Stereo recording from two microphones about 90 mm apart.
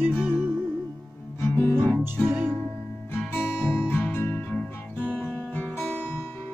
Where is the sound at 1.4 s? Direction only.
25° left (ahead or behind).